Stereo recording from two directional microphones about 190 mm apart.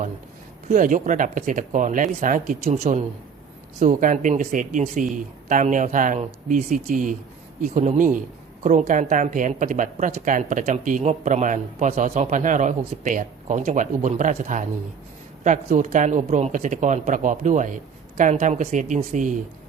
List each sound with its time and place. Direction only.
0.7 s a woman's voice: 40° right (ahead or behind)